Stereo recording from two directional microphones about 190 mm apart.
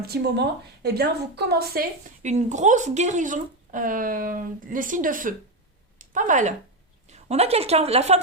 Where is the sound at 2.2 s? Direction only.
40° right (ahead or behind).